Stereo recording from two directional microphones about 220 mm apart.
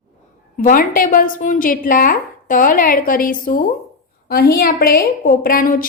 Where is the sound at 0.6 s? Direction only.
40° left (ahead or behind).